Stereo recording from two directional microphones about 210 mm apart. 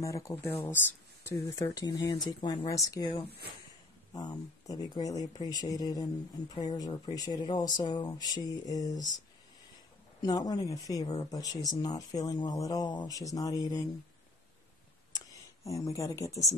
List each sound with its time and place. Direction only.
0.0 s speech: 15° left (ahead or behind)
10.2 s speech: 15° left (ahead or behind)
15.1 s speech: 15° left (ahead or behind)